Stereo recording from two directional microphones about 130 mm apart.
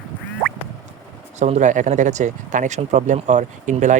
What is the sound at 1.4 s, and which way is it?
Speech, 65° right (ahead or behind).